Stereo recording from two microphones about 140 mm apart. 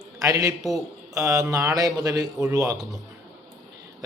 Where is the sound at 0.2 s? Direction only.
25° right (ahead or behind).